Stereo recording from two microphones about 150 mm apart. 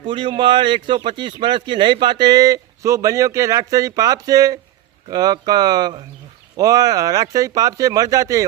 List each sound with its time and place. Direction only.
0.0 s speech: 35° right (ahead or behind)